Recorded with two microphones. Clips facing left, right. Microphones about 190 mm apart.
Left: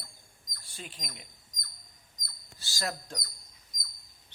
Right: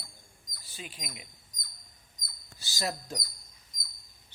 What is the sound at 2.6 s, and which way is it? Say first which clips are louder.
Speech: right 1 dB; 20° right (ahead or behind).